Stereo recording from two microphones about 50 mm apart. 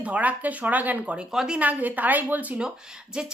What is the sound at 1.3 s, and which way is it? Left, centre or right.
Speech, centre.